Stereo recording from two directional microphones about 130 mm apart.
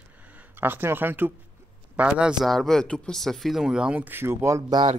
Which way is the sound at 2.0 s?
5° right (ahead or behind).